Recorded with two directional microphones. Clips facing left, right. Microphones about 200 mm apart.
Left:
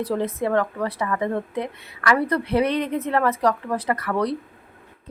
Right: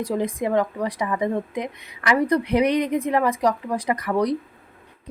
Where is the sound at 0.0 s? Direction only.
10° right (ahead or behind).